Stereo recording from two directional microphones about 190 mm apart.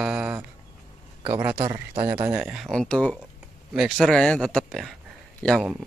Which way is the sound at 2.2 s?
5° right (ahead or behind).